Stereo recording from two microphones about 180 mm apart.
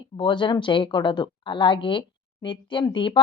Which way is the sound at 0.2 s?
25° left (ahead or behind).